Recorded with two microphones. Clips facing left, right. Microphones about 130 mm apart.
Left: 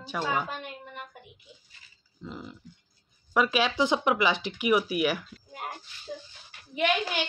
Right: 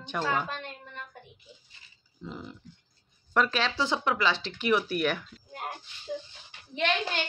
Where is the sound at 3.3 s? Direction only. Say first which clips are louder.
Left 2 dB; 10° left (ahead or behind).